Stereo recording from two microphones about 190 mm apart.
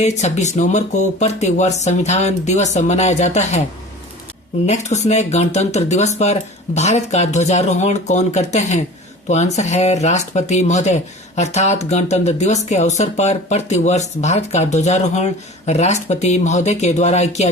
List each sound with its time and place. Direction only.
0.0 s speech: 35° left (ahead or behind)
4.6 s speech: 35° left (ahead or behind)